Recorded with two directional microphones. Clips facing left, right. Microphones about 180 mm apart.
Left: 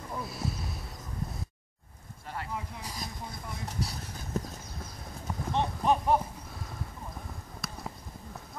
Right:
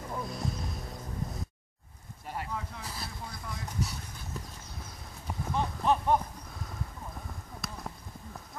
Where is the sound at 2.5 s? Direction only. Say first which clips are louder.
Even; 15° left (ahead or behind).